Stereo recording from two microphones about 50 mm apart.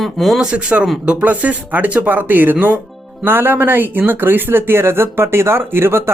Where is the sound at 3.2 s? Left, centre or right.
Right.